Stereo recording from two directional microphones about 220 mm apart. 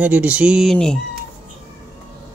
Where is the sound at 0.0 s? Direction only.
5° right (ahead or behind).